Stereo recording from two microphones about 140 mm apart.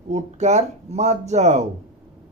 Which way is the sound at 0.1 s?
55° right (ahead or behind).